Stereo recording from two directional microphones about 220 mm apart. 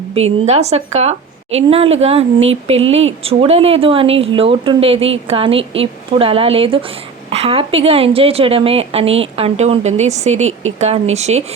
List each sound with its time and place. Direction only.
0.1 s a woman's voice: 30° right (ahead or behind)